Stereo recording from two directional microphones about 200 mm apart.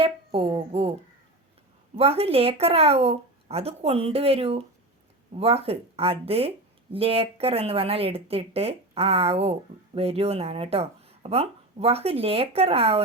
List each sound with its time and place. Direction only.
0.0 s speech: 30° right (ahead or behind)
2.0 s speech: 30° right (ahead or behind)